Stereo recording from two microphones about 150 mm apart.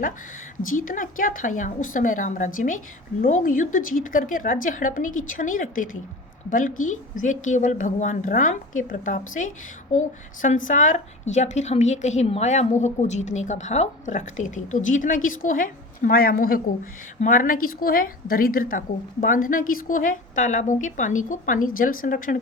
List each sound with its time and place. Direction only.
0.7 s a woman's voice: 65° left (ahead or behind); by 16.6 s 80° left
17.2 s a woman's voice: 60° left (ahead or behind)